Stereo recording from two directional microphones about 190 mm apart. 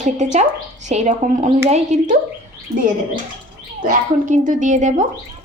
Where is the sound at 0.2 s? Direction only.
40° right (ahead or behind).